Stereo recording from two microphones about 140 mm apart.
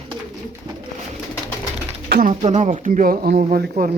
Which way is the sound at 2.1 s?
70° right (ahead or behind).